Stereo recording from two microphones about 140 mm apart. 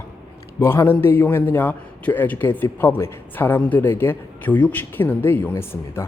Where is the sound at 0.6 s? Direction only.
15° left (ahead or behind).